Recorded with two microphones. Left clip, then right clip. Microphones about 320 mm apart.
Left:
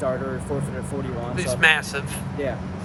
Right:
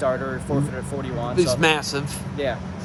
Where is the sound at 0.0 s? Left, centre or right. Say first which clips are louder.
Right 2 dB; centre.